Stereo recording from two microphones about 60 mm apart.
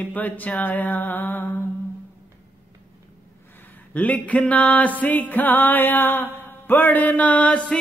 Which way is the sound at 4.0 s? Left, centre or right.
Left.